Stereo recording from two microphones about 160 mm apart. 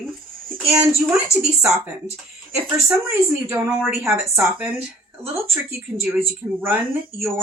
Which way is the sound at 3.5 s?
10° right (ahead or behind).